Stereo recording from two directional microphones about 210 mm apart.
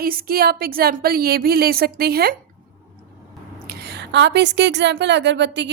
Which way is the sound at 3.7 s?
50° right (ahead or behind).